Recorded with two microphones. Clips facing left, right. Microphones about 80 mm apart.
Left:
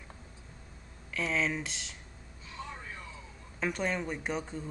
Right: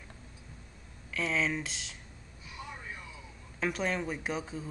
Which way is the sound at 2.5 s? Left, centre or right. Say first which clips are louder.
Left 1 dB; centre.